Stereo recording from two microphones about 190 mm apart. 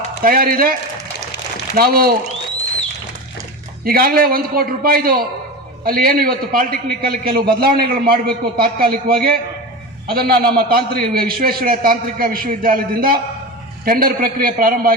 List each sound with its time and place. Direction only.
0.2 s a man's voice: 50° right (ahead or behind)
3.8 s a man's voice: 50° right (ahead or behind)